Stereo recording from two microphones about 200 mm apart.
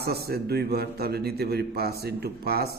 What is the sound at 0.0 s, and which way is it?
A man's voice, 50° right (ahead or behind).